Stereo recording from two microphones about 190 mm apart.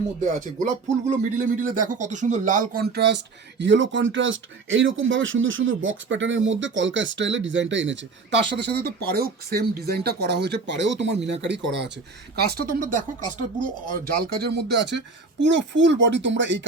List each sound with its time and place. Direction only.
1.0 s speech: 40° right (ahead or behind); by 16.6 s 75° right (ahead or behind)